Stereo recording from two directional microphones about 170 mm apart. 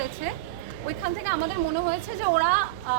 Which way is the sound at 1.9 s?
60° right (ahead or behind).